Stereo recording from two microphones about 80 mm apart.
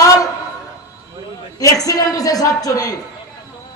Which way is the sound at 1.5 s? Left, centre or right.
Left.